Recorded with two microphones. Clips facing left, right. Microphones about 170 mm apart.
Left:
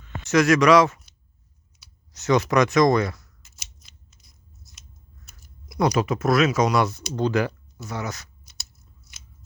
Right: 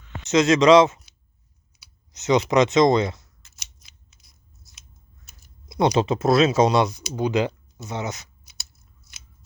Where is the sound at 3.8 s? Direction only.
5° right (ahead or behind).